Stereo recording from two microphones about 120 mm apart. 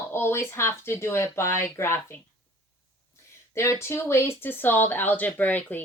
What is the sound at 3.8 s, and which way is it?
Speech, 20° left (ahead or behind).